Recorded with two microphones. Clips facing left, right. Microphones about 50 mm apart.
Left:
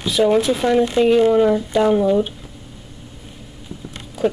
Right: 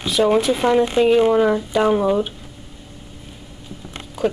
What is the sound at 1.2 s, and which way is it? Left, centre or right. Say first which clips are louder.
Speech: left 1 dB; centre.